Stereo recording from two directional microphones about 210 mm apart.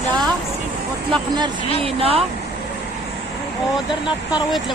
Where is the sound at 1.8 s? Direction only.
25° right (ahead or behind).